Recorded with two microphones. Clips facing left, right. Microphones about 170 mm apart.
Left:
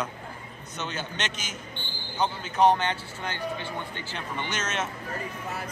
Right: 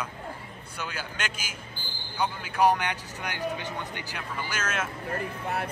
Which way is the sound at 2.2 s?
10° right (ahead or behind).